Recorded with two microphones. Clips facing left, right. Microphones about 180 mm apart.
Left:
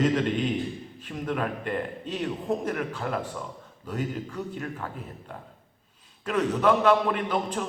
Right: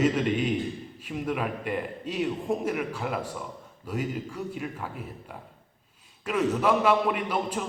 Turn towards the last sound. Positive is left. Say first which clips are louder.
# left 1 dB
turn(degrees=-10)  # may be behind; listen again after turning